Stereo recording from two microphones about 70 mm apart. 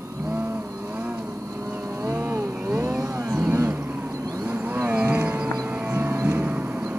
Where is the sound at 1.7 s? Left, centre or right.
Right.